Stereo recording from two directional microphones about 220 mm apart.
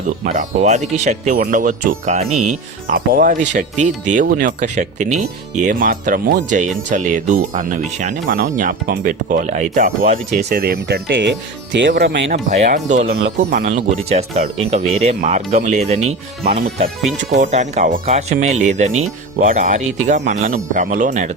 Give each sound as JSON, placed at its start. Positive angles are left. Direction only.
{"t": 0.3, "sound": "speech", "side_deg": -35}
{"t": 12.5, "sound": "speech", "side_deg": -35}
{"t": 13.2, "sound": "speech", "side_deg": -45}
{"t": 16.4, "sound": "speech", "side_deg": -45}
{"t": 17.5, "sound": "speech", "side_deg": -30}